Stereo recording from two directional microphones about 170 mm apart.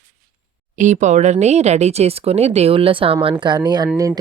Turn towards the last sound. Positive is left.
turn(degrees=-20)  # may be behind; listen again after turning